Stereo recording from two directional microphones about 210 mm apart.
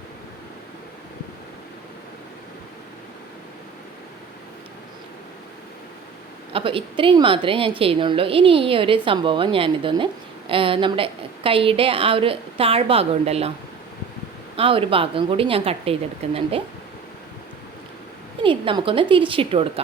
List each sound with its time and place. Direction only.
6.5 s a woman's voice: 25° right (ahead or behind)
14.5 s a woman's voice: 25° right (ahead or behind)
18.4 s a woman's voice: 25° right (ahead or behind)